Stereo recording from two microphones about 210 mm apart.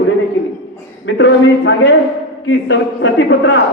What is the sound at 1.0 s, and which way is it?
A man's voice, 60° left (ahead or behind).